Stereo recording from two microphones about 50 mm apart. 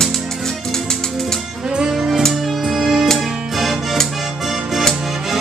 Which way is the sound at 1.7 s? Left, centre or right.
Centre.